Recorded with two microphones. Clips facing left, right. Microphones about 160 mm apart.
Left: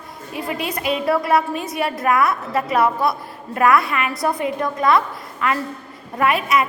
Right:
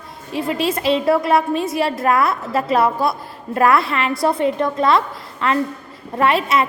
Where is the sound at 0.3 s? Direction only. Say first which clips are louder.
Right 5 dB; 25° right (ahead or behind).